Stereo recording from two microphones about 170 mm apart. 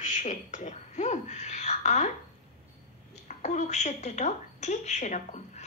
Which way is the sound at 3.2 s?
40° left (ahead or behind).